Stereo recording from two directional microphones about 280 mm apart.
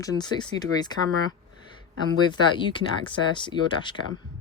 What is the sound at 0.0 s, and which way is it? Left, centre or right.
Speech, centre.